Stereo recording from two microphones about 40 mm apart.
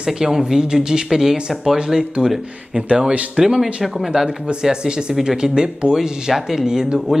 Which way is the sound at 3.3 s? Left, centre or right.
Centre.